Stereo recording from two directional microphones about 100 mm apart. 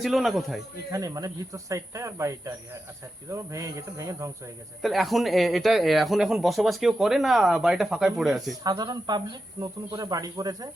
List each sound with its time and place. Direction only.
0.0 s speech: centre (ahead or behind)
0.9 s speech: 35° right (ahead or behind)
4.8 s speech: centre (ahead or behind)
8.6 s speech: 40° right (ahead or behind)